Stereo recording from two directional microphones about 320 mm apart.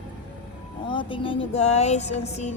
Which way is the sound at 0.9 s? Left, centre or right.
Centre.